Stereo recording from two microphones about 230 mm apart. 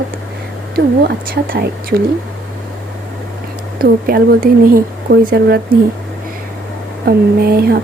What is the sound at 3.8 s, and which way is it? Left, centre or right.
Speech, right.